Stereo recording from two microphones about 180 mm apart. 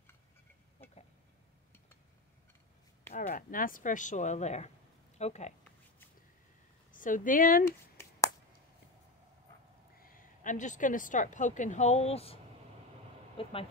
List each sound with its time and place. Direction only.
3.1 s speech: 50° left (ahead or behind)
6.9 s a woman's voice: 45° left (ahead or behind)
9.9 s a woman's voice: 50° left (ahead or behind); by 12.4 s 35° left (ahead or behind)
13.4 s speech: 30° left (ahead or behind)